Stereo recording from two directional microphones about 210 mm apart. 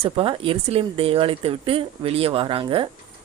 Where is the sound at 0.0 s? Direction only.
25° right (ahead or behind).